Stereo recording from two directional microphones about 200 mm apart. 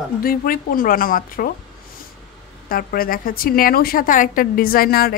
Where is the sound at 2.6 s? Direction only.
45° left (ahead or behind).